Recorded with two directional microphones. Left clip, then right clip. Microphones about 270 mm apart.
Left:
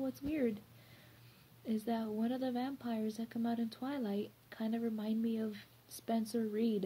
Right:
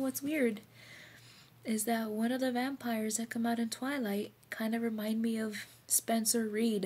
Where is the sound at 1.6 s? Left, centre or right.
Centre.